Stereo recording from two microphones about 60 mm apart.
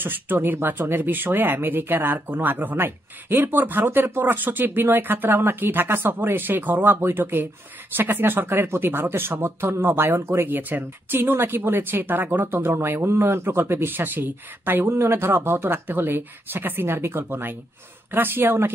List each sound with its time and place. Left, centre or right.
0.0 s speech: right